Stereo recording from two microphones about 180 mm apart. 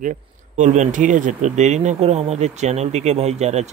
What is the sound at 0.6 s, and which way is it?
Speech, 45° right (ahead or behind).